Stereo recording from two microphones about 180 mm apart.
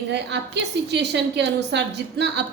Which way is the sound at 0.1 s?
70° right (ahead or behind).